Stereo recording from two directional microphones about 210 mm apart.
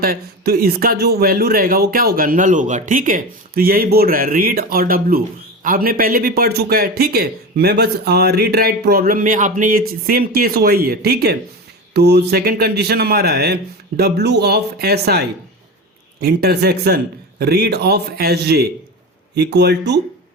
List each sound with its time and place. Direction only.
0.0 s a man's voice: 45° right (ahead or behind)